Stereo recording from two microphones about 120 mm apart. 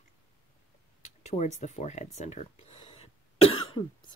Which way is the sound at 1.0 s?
70° left (ahead or behind).